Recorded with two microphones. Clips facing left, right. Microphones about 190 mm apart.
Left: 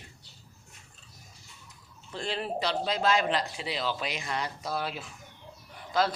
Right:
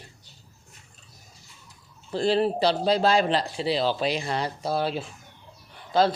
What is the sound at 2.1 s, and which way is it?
Speech, 35° right (ahead or behind).